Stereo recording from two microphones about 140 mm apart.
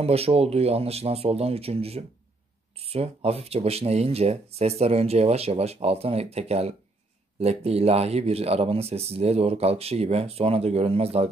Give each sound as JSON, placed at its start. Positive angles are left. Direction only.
{"t": 0.0, "sound": "speech", "side_deg": -45}